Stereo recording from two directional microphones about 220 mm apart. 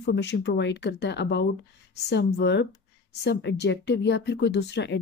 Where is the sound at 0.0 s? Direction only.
50° left (ahead or behind).